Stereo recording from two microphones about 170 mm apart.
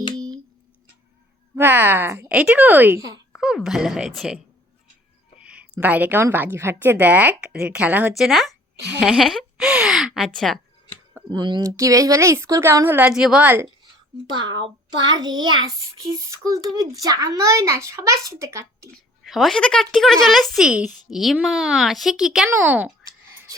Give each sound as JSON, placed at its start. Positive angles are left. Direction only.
{"t": 1.5, "sound": "a woman's voice", "side_deg": -10}
{"t": 5.4, "sound": "a woman's voice", "side_deg": -5}
{"t": 11.3, "sound": "a woman's voice", "side_deg": -25}
{"t": 14.3, "sound": "a child's voice", "side_deg": -25}
{"t": 19.2, "sound": "a woman's voice", "side_deg": 0}